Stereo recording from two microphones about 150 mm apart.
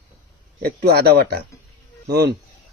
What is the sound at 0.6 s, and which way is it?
Speech, 85° right.